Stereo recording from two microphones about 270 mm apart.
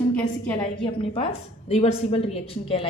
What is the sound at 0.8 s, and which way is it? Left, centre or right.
A woman's voice, centre.